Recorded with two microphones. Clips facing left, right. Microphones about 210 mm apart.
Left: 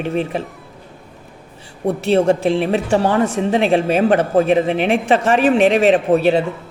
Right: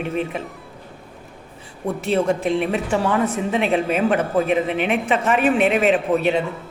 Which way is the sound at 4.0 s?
75° left (ahead or behind).